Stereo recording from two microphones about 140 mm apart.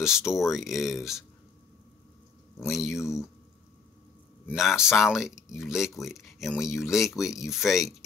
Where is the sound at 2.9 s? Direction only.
20° left (ahead or behind).